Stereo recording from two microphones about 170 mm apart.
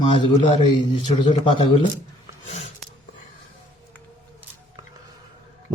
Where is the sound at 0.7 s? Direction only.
30° left (ahead or behind).